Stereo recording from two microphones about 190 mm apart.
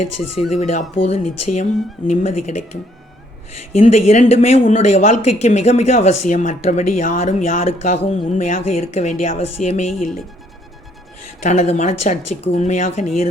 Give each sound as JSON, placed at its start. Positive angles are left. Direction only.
{"t": 0.5, "sound": "speech", "side_deg": 35}
{"t": 3.8, "sound": "speech", "side_deg": 35}
{"t": 11.4, "sound": "speech", "side_deg": 35}